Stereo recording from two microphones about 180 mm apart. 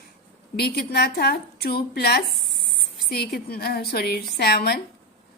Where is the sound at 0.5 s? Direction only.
60° left (ahead or behind).